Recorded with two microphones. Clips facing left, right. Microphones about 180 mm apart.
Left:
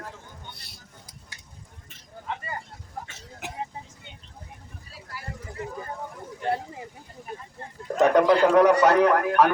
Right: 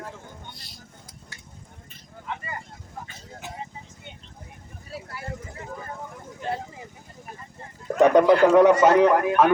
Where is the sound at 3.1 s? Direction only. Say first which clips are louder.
Even; 85° left.